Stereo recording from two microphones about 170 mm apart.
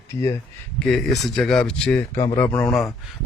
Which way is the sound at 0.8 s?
Centre (ahead or behind).